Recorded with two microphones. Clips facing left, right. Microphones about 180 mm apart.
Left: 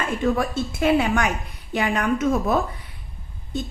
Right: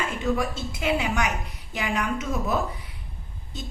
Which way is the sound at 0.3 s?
55° left (ahead or behind).